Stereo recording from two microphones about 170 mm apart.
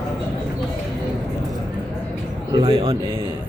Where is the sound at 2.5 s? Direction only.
25° right (ahead or behind).